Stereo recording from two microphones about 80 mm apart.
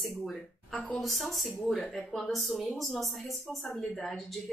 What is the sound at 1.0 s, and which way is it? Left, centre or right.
A woman's voice, centre.